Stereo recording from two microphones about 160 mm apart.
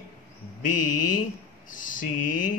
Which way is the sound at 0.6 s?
55° left (ahead or behind).